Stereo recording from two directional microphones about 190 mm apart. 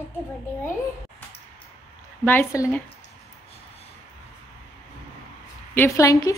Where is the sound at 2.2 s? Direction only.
10° left (ahead or behind).